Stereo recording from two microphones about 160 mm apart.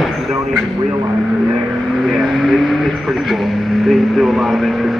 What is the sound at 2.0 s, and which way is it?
Vehicle, centre (ahead or behind).